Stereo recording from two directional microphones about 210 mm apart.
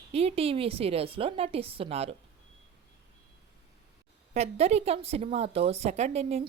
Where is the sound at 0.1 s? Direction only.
30° right (ahead or behind).